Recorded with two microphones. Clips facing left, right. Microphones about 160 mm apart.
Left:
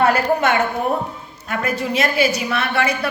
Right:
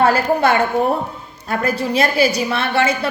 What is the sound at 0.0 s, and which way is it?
A woman's voice, 30° right (ahead or behind).